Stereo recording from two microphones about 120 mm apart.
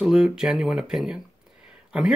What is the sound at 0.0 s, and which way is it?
Speech, 5° right (ahead or behind).